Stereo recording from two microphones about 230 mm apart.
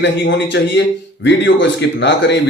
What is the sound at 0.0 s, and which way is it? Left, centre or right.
A man's voice, left.